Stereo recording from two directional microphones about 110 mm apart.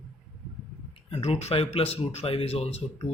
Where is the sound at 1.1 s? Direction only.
70° left (ahead or behind).